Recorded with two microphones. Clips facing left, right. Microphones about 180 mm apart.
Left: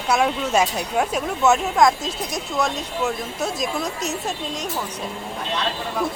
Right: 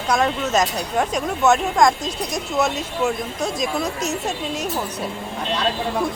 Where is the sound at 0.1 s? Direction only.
10° left (ahead or behind).